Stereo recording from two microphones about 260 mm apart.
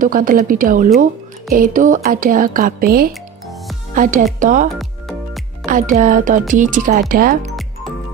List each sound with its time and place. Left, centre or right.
0.0 s speech: right
3.1 s music: centre
3.9 s speech: right
4.7 s music: centre
5.7 s speech: right